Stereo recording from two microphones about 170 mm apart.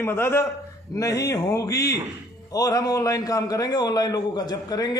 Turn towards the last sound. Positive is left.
turn(degrees=20)  # may be behind; listen again after turning